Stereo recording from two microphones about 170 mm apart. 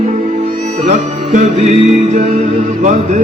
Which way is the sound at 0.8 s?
45° right (ahead or behind).